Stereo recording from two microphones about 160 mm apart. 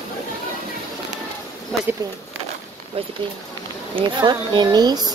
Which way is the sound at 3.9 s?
30° right (ahead or behind).